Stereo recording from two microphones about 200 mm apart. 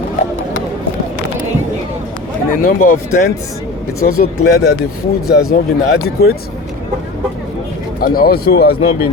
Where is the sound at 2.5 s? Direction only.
45° left (ahead or behind).